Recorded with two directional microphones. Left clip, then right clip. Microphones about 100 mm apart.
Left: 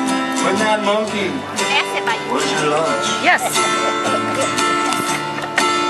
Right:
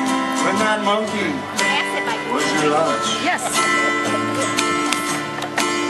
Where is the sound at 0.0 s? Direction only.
15° left (ahead or behind).